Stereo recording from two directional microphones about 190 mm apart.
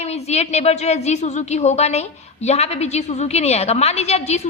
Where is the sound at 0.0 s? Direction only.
35° left (ahead or behind).